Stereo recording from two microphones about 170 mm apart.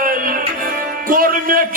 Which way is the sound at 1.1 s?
55° right (ahead or behind).